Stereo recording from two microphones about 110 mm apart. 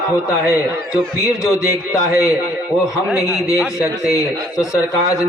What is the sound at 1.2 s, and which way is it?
A man's voice, 25° left (ahead or behind).